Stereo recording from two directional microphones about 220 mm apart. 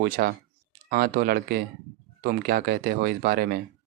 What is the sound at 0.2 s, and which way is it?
Speech, 45° right (ahead or behind).